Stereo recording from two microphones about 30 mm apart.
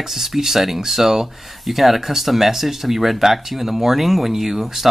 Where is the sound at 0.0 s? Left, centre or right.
Centre.